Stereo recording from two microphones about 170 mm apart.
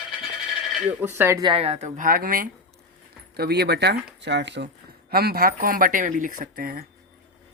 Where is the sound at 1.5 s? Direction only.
35° right (ahead or behind).